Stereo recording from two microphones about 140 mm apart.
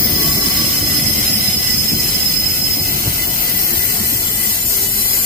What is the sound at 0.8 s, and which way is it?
Jet engine, 70° right (ahead or behind).